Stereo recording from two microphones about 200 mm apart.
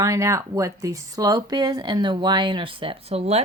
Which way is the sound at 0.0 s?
15° right (ahead or behind).